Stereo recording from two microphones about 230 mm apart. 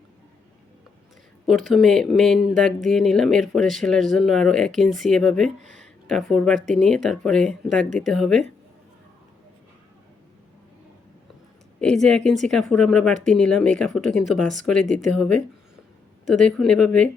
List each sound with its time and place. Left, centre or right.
1.5 s speech: centre
11.8 s speech: centre
14.8 s speech: right
15.1 s speech: centre